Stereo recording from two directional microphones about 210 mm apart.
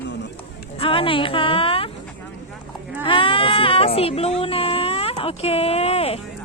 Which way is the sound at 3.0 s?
25° left (ahead or behind).